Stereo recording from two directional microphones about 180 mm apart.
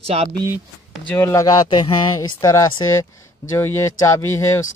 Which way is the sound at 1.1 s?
15° left (ahead or behind).